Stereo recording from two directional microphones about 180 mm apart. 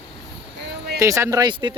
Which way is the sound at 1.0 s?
15° right (ahead or behind).